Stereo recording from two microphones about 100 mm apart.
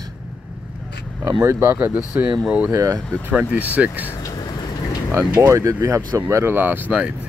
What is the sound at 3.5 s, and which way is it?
Speech, 15° right (ahead or behind).